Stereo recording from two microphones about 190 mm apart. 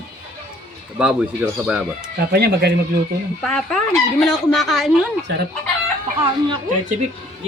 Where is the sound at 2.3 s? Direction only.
60° right (ahead or behind).